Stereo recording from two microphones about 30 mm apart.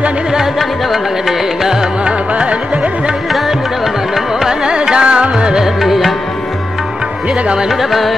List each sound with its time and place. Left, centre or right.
0.6 s music: centre
2.0 s music: right
3.4 s music: centre
4.5 s music: right
5.8 s music: centre
7.7 s music: centre